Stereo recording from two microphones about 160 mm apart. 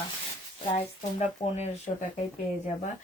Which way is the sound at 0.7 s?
45° left (ahead or behind).